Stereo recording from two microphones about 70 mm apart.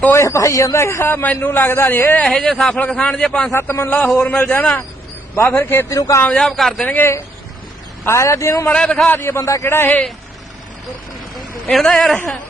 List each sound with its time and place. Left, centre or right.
0.1 s speech: left
1.2 s a man's voice: left
2.2 s a man's voice: centre
3.5 s a man's voice: left
5.9 s speech: left
6.3 s a man's voice: centre
6.8 s a man's voice: left
8.0 s speech: left
8.7 s a man's voice: centre
9.0 s a man's voice: left
9.4 s a man's voice: left
9.6 s a man's voice: left
11.7 s a man's voice: centre